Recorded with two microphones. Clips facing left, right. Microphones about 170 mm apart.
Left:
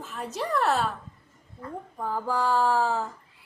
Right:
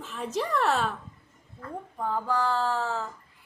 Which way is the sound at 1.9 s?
10° left (ahead or behind).